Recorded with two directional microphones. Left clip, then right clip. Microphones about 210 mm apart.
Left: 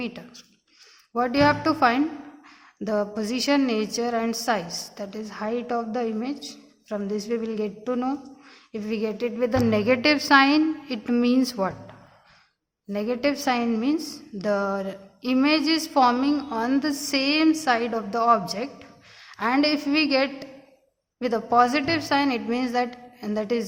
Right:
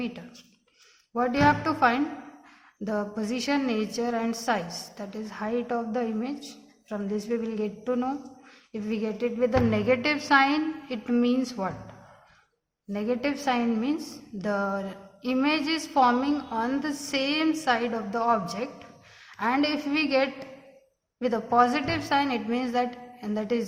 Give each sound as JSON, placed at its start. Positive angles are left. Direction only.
{"t": 0.0, "sound": "a woman's voice", "side_deg": 50}
{"t": 12.9, "sound": "a woman's voice", "side_deg": 50}